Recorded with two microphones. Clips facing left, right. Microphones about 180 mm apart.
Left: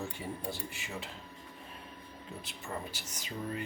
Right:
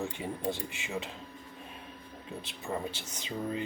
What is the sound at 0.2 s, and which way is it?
Speech, 20° right (ahead or behind).